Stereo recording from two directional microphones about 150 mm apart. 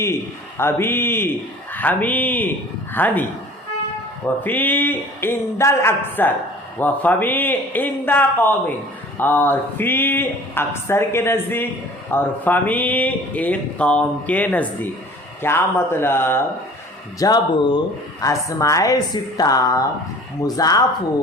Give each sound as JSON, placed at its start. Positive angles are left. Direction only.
{"t": 0.0, "sound": "speech", "side_deg": 15}
{"t": 4.4, "sound": "speech", "side_deg": 10}
{"t": 17.2, "sound": "a woman's voice", "side_deg": 25}